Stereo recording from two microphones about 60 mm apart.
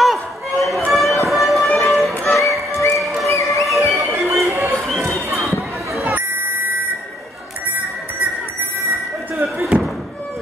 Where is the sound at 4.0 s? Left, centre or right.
Right.